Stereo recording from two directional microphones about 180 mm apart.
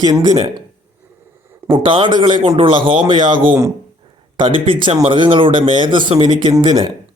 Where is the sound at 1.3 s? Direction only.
15° right (ahead or behind).